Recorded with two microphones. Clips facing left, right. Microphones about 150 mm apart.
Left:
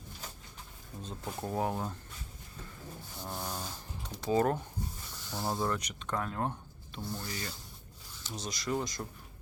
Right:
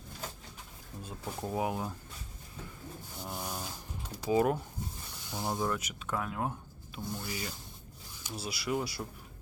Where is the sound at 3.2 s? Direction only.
10° right (ahead or behind).